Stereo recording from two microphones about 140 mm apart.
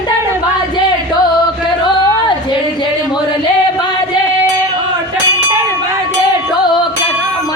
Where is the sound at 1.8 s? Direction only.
35° left (ahead or behind).